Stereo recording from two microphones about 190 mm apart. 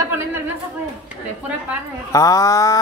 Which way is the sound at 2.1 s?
15° left (ahead or behind).